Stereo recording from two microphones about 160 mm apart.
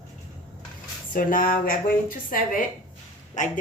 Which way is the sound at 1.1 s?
60° left (ahead or behind).